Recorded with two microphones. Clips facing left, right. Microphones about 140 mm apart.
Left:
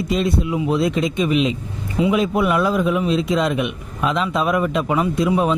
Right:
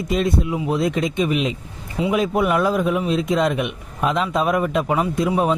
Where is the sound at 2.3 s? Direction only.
40° right (ahead or behind).